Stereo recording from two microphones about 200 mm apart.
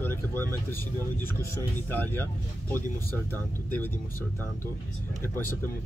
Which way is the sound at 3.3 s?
10° left (ahead or behind).